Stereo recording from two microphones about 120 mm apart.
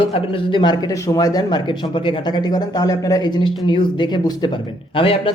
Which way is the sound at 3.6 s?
40° left (ahead or behind).